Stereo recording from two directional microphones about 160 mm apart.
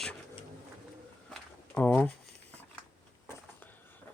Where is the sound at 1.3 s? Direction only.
10° left (ahead or behind).